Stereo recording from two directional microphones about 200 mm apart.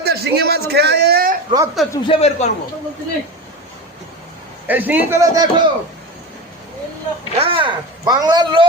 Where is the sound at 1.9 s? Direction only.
25° left (ahead or behind).